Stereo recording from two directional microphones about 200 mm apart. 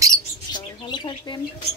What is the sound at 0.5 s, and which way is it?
Bird, 20° left (ahead or behind).